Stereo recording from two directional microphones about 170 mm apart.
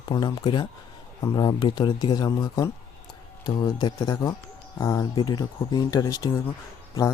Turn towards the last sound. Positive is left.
turn(degrees=20)  # may be behind; listen again after turning